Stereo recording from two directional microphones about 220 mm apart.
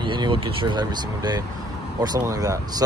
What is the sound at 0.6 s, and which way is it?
Speech, 20° right (ahead or behind).